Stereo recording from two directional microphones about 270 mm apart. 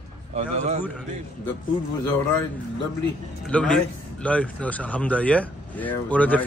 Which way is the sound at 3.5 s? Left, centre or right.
Centre.